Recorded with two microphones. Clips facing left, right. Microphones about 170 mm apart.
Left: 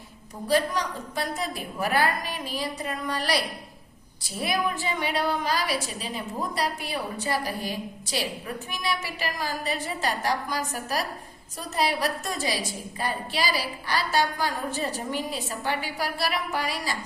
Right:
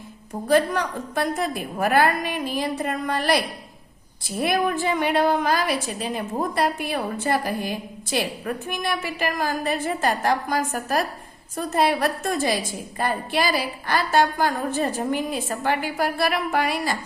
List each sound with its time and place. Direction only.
0.4 s a woman's voice: 55° right (ahead or behind)